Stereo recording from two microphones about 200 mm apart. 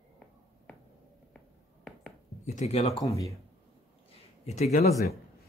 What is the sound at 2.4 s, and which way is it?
Speech, 35° left (ahead or behind).